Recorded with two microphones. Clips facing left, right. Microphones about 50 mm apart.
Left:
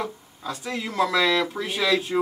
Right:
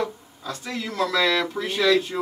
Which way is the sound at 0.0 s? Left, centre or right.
Centre.